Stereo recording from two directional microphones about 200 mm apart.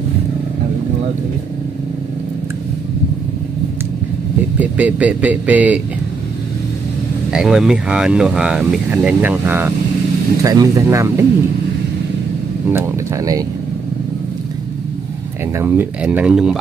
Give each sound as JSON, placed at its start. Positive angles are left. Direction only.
{"t": 4.6, "sound": "speech", "side_deg": -5}
{"t": 7.2, "sound": "speech", "side_deg": 0}
{"t": 12.7, "sound": "speech", "side_deg": -15}
{"t": 15.5, "sound": "speech", "side_deg": -10}